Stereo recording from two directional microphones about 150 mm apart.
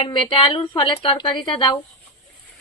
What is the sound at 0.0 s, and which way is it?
A woman's voice, 35° left (ahead or behind).